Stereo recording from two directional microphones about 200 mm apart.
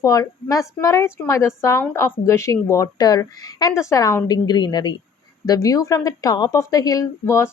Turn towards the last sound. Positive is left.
turn(degrees=15)  # may be behind; listen again after turning